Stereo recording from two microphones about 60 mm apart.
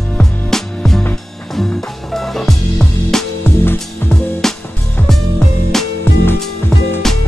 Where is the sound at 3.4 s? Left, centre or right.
Left.